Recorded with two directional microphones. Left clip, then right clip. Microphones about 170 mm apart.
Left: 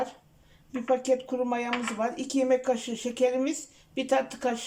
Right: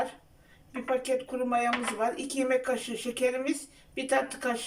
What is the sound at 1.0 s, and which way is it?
Speech, 25° left (ahead or behind).